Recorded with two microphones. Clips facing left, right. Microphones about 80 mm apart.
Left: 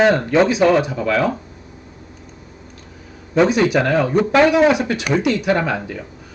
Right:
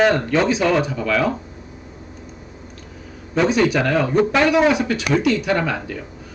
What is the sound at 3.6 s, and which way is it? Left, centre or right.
Speech, centre.